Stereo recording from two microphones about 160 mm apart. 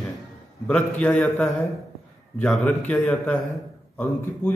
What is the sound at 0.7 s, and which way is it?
Speech, 10° left (ahead or behind).